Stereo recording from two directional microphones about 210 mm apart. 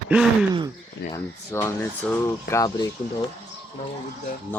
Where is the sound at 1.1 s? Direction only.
10° left (ahead or behind).